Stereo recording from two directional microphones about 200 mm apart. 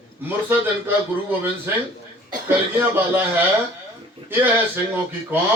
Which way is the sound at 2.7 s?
10° right (ahead or behind).